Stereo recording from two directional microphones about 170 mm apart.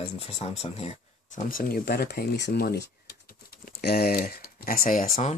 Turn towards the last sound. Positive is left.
turn(degrees=50)  # may be behind; listen again after turning